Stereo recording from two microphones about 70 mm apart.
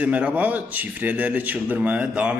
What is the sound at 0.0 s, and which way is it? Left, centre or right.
A man's voice, centre.